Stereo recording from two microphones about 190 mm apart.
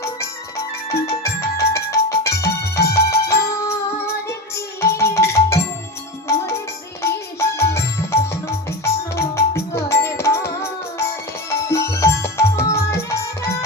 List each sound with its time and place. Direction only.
0.9 s music: 15° left (ahead or behind)
2.8 s music: 55° left (ahead or behind)
3.2 s music: 15° left (ahead or behind)